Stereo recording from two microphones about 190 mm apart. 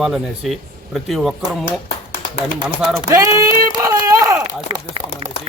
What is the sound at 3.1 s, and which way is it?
Speech, 15° right (ahead or behind).